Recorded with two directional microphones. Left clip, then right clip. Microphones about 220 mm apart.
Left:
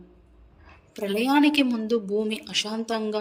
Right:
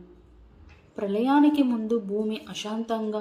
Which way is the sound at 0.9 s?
Centre (ahead or behind).